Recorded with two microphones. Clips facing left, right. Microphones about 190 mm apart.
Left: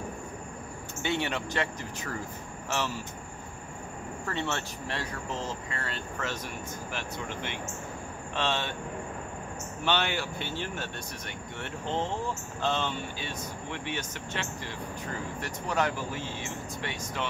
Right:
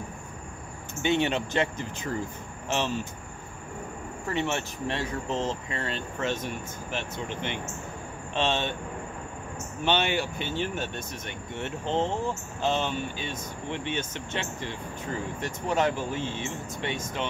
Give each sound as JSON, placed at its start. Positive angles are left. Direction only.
{"t": 1.0, "sound": "speech", "side_deg": -20}
{"t": 4.3, "sound": "speech", "side_deg": -15}
{"t": 9.8, "sound": "speech", "side_deg": -20}